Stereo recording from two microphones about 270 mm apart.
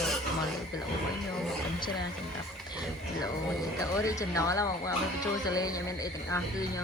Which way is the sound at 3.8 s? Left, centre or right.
Centre.